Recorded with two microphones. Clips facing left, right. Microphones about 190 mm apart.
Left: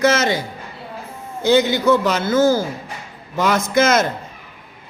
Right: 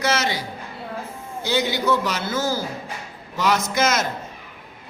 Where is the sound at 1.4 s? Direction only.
50° left (ahead or behind).